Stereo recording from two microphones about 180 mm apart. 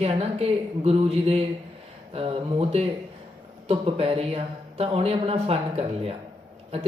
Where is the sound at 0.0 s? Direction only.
35° right (ahead or behind).